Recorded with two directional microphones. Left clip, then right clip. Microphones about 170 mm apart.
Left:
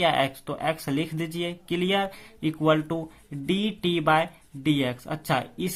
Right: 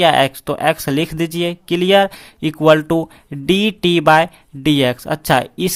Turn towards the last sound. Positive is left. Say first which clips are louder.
# right 12 dB
turn(degrees=-40)  # may be behind; listen again after turning